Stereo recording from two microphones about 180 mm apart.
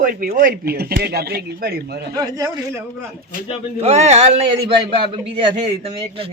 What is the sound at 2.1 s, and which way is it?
Speech, 20° right (ahead or behind).